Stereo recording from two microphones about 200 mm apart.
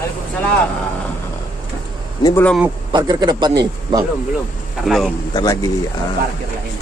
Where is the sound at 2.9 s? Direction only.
20° right (ahead or behind).